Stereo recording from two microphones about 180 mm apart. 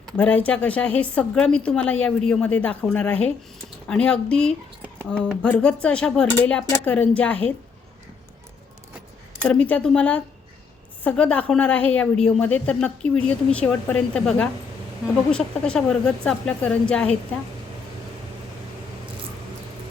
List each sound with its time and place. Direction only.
0.2 s a woman's voice: 10° left (ahead or behind)
9.4 s a woman's voice: 5° left (ahead or behind)